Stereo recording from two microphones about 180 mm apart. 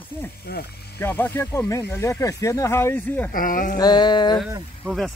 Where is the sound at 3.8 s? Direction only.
25° left (ahead or behind).